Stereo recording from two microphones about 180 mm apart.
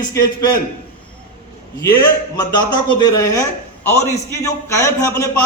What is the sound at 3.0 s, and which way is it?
A woman's voice, 20° left (ahead or behind).